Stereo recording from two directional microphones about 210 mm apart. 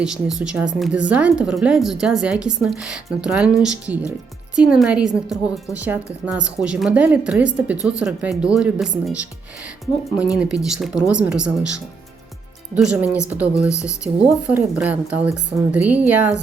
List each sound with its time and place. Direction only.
0.0 s a woman's voice: 5° right (ahead or behind)
10.3 s speech: 5° right (ahead or behind)
12.7 s a woman's voice: 5° right (ahead or behind)